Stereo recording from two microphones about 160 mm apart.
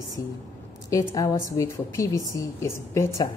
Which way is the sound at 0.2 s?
20° left (ahead or behind).